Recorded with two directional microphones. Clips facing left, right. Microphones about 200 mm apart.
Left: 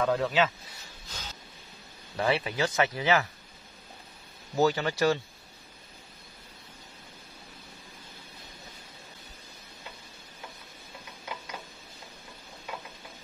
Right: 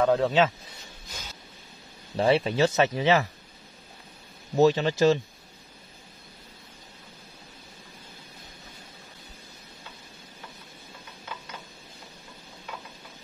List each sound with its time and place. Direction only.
0.0 s speech: 25° right (ahead or behind)
1.0 s a sound: 15° right (ahead or behind)
2.1 s speech: 30° right (ahead or behind)
4.6 s speech: 20° right (ahead or behind)